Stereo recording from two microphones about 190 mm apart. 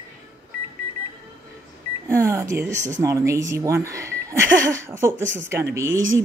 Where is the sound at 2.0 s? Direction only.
15° right (ahead or behind).